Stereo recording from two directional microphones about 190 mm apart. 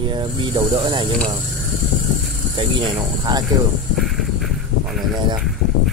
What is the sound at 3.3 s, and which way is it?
Speech, 20° right (ahead or behind).